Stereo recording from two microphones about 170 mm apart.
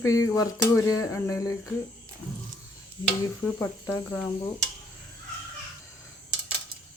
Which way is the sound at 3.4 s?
10° left (ahead or behind).